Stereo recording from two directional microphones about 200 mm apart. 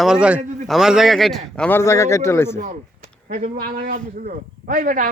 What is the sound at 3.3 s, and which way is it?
A man's voice, 40° right (ahead or behind).